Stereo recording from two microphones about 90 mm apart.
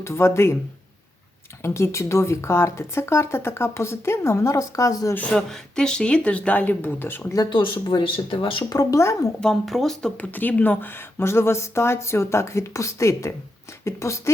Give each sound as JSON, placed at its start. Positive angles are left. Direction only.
{"t": 0.0, "sound": "speech", "side_deg": 30}
{"t": 1.6, "sound": "speech", "side_deg": 30}
{"t": 5.5, "sound": "speech", "side_deg": 5}
{"t": 7.5, "sound": "speech", "side_deg": 65}
{"t": 8.7, "sound": "speech", "side_deg": 40}
{"t": 9.4, "sound": "speech", "side_deg": 0}
{"t": 10.2, "sound": "speech", "side_deg": 20}